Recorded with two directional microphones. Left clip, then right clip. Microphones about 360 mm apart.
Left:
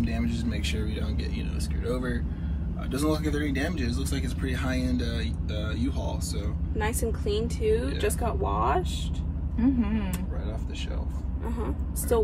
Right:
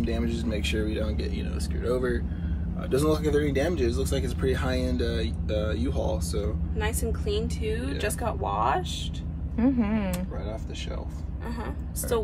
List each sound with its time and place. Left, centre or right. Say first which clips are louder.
0.1 s speech: right 2 dB; centre
6.8 s a woman's voice: left 2 dB; centre
7.7 s speech: left 2 dB; centre
9.6 s a woman's voice: right 1 dB; right